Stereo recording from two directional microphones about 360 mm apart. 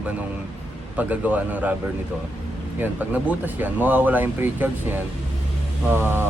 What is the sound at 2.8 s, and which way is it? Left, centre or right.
Speech, centre.